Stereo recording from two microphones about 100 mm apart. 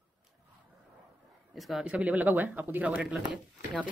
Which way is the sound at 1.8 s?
15° right (ahead or behind).